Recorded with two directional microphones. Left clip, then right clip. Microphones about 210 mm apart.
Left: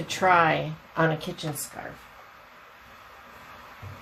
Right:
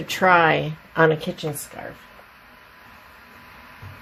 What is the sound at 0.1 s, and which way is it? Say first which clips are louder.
A woman's voice: right 4 dB; 50° right (ahead or behind).